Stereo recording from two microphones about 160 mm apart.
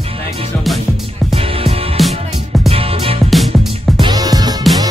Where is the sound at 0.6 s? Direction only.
Centre (ahead or behind).